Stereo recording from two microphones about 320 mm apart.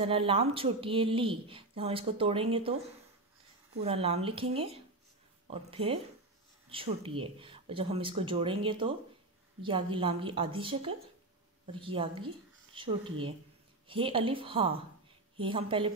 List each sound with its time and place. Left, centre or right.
0.0 s speech: centre
3.8 s speech: centre